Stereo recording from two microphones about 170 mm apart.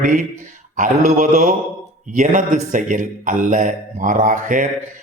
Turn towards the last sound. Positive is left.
turn(degrees=-50)  # may be behind; listen again after turning